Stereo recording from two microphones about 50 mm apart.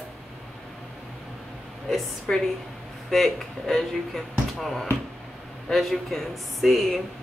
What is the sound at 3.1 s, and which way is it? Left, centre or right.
Speech, centre.